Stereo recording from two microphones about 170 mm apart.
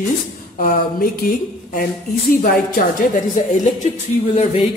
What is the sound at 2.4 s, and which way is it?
Speech, 60° left (ahead or behind).